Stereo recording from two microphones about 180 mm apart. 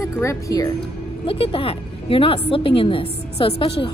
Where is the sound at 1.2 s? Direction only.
30° left (ahead or behind).